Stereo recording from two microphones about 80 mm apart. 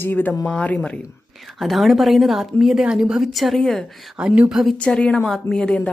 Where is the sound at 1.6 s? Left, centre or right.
Centre.